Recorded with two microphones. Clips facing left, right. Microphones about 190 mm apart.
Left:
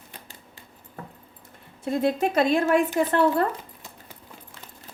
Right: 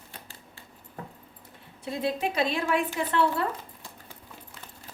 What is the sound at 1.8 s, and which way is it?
Speech, 50° left (ahead or behind).